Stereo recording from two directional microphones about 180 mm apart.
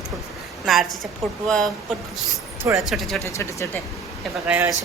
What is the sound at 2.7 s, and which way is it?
Speech, centre (ahead or behind).